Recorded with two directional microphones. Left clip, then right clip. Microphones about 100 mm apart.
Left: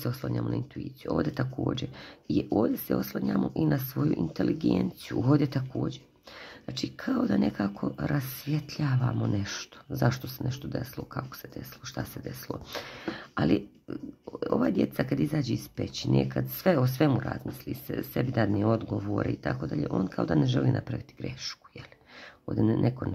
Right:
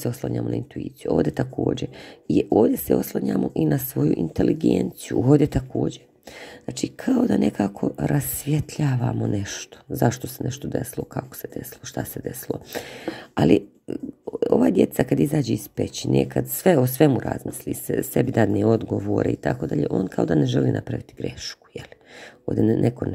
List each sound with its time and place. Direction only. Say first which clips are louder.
0.0 s speech: right 7 dB; 45° right (ahead or behind)